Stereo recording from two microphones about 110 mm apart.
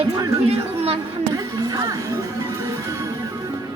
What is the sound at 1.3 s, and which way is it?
Music, 35° right (ahead or behind).